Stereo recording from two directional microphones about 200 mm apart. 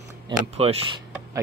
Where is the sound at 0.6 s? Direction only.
30° right (ahead or behind).